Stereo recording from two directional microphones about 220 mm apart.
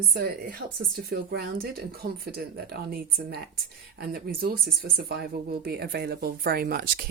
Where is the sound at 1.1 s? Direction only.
45° right (ahead or behind).